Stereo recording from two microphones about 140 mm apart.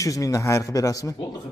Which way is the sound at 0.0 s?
25° left (ahead or behind).